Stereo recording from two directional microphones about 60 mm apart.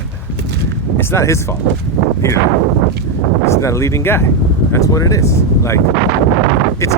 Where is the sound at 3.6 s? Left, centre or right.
Left.